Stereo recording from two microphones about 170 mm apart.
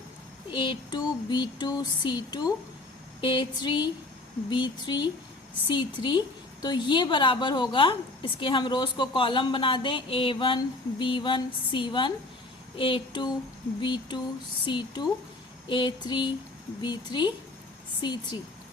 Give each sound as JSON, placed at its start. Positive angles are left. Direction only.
{"t": 0.5, "sound": "a woman's voice", "side_deg": 30}
{"t": 12.7, "sound": "a sound", "side_deg": 30}
{"t": 13.8, "sound": "a woman's voice", "side_deg": 30}